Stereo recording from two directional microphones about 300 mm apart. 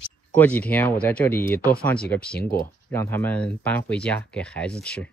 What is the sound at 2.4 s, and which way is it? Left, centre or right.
Speech, left.